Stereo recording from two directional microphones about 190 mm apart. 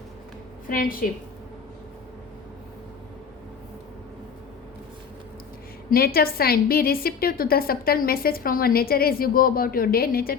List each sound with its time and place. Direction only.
0.7 s a woman's voice: 50° left (ahead or behind)
5.9 s a woman's voice: 55° left (ahead or behind)